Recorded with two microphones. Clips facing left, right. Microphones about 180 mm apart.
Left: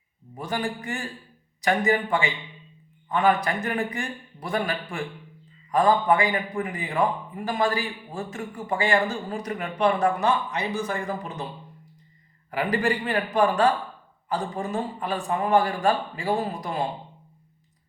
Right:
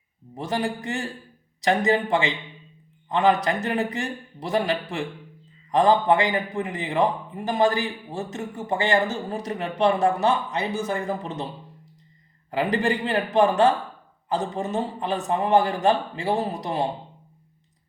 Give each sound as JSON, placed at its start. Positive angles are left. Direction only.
{"t": 0.3, "sound": "a man's voice", "side_deg": -25}
{"t": 12.5, "sound": "a man's voice", "side_deg": -25}